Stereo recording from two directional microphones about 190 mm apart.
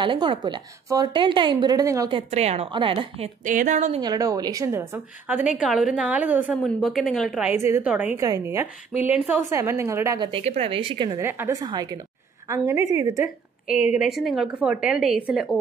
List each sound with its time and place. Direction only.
0.0 s a woman's voice: 25° right (ahead or behind)
3.4 s a woman's voice: 40° right (ahead or behind)
4.0 s a woman's voice: 20° right (ahead or behind)
11.1 s a woman's voice: 10° right (ahead or behind)
13.9 s a woman's voice: centre (ahead or behind)